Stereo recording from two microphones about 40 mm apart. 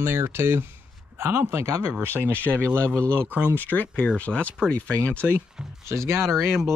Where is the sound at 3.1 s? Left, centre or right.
Right.